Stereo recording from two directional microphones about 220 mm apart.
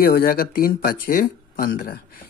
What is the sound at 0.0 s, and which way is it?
Speech, 40° left (ahead or behind).